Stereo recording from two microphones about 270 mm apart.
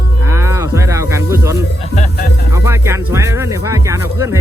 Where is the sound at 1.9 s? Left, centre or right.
Left.